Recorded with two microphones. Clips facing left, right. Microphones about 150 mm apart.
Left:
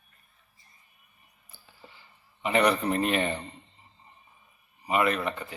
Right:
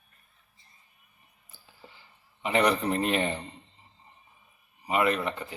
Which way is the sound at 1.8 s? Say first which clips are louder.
Even; 15° right (ahead or behind).